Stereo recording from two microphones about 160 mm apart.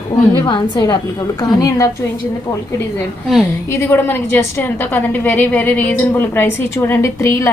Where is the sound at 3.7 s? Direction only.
15° left (ahead or behind).